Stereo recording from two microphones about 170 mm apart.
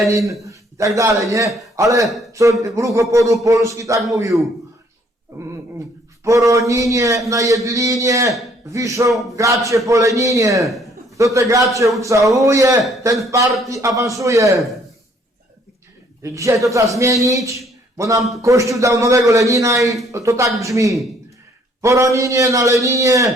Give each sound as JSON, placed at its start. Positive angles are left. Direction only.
{"t": 0.1, "sound": "a man's voice", "side_deg": -20}
{"t": 6.2, "sound": "a man's voice", "side_deg": -20}
{"t": 16.2, "sound": "a man's voice", "side_deg": -20}